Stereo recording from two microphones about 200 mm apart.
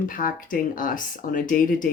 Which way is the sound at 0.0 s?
45° left (ahead or behind).